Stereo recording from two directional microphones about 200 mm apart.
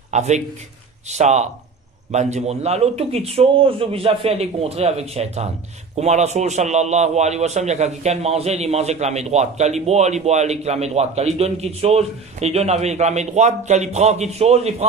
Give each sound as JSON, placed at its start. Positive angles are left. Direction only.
{"t": 0.1, "sound": "a man's voice", "side_deg": -35}